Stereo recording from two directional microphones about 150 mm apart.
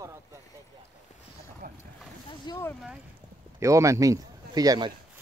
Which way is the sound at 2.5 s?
30° left (ahead or behind).